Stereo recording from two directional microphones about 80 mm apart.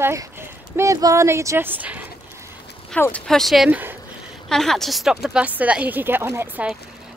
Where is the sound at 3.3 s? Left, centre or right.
Centre.